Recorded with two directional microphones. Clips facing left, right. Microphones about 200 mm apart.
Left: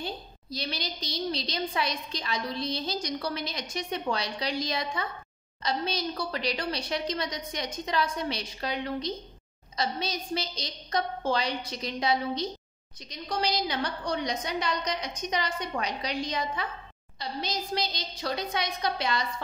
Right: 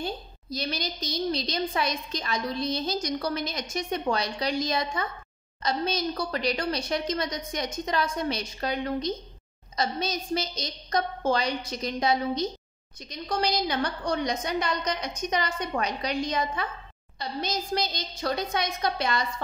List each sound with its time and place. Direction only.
0.0 s a woman's voice: 45° right (ahead or behind)